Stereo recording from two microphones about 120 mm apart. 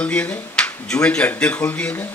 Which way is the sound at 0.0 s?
10° left (ahead or behind).